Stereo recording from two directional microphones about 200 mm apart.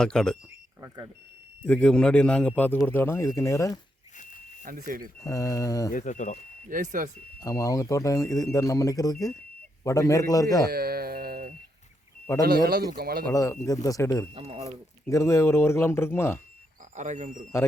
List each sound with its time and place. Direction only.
0.0 s speech: 5° left (ahead or behind)
0.8 s speech: 20° right (ahead or behind)
1.6 s a man's voice: 5° left (ahead or behind)
4.9 s speech: 45° right (ahead or behind)
5.2 s a man's voice: 15° left (ahead or behind)
5.9 s speech: 40° left (ahead or behind)
6.7 s speech: 40° right (ahead or behind)
7.3 s a man's voice: 15° left (ahead or behind)
10.7 s music: 50° right (ahead or behind)
12.6 s speech: 50° right (ahead or behind)
13.3 s a man's voice: 15° left (ahead or behind)
14.3 s speech: 25° right (ahead or behind)
14.6 s a man's voice: 15° left (ahead or behind)
16.9 s speech: 35° right (ahead or behind)